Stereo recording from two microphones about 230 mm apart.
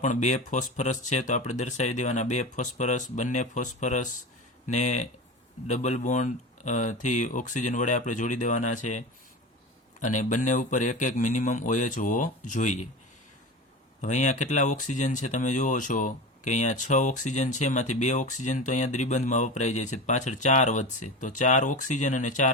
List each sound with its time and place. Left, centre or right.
0.0 s speech: left
14.0 s speech: left